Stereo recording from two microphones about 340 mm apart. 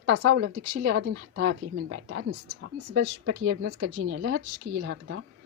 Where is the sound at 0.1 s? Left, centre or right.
Right.